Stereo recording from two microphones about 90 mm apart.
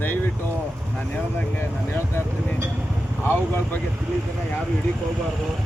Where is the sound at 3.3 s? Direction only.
25° left (ahead or behind).